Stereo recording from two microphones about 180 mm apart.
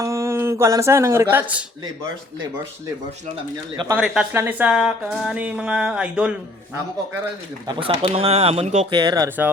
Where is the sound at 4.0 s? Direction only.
5° right (ahead or behind).